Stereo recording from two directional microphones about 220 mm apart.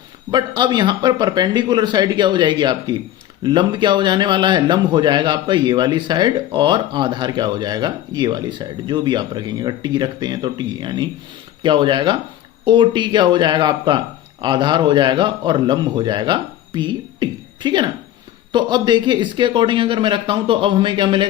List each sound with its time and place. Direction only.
0.3 s a man's voice: 20° right (ahead or behind)